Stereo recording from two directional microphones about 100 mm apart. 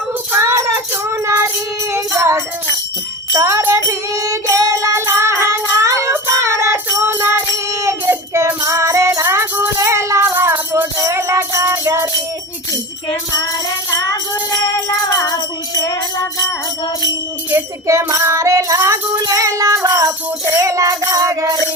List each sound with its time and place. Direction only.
0.3 s music: 30° right (ahead or behind)
3.3 s jingle bell: 30° right (ahead or behind)
3.8 s music: 30° right (ahead or behind)
9.2 s music: 20° right (ahead or behind)
10.9 s music: 30° right (ahead or behind)
15.1 s music: 35° left (ahead or behind)
17.5 s music: 30° right (ahead or behind)